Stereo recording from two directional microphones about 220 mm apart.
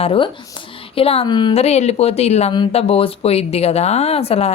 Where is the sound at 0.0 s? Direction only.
25° left (ahead or behind).